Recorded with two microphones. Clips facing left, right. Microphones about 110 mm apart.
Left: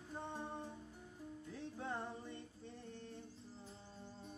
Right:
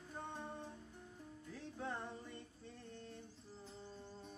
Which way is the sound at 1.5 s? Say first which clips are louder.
Even; 20° left (ahead or behind).